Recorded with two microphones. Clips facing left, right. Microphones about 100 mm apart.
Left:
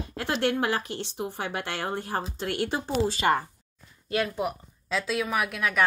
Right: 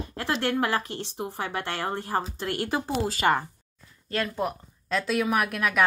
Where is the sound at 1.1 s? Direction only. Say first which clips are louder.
Right 1 dB; 35° right (ahead or behind).